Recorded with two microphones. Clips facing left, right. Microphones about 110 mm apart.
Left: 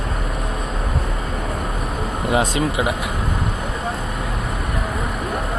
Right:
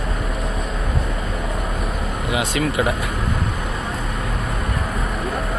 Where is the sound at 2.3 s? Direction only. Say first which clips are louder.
Left 3 dB; 35° left (ahead or behind).